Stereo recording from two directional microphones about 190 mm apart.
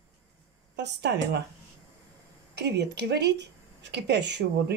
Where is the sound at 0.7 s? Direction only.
60° right (ahead or behind).